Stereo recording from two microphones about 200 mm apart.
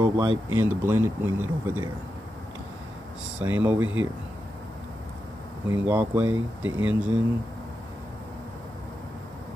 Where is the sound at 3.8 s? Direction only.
80° right.